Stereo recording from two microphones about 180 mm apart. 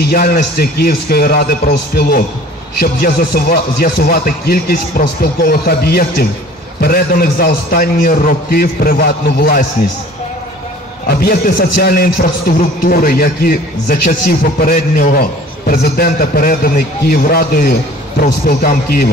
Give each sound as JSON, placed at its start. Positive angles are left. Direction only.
{"t": 0.0, "sound": "speech", "side_deg": 55}
{"t": 11.2, "sound": "speech", "side_deg": 55}